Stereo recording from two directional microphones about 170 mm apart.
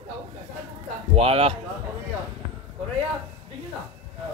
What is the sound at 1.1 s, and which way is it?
Speech, 35° right (ahead or behind).